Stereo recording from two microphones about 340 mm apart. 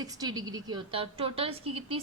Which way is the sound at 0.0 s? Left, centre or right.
Centre.